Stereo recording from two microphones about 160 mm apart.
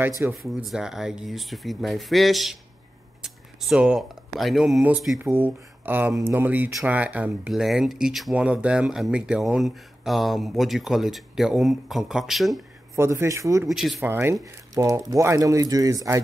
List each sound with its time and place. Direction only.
0.3 s speech: centre (ahead or behind)
12.9 s a man's voice: 15° right (ahead or behind)
13.7 s speech: centre (ahead or behind)
14.0 s a man's voice: 15° right (ahead or behind)